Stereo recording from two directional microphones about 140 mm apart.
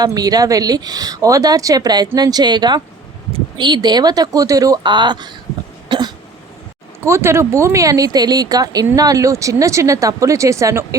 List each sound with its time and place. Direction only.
0.0 s speech: 25° right (ahead or behind)
5.9 s cough: 30° right (ahead or behind)
7.0 s speech: 20° right (ahead or behind)